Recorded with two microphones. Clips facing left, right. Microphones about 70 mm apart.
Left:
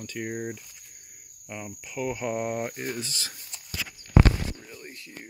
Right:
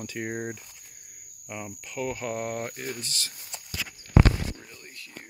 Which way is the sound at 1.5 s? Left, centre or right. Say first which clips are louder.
Right 1 dB; centre.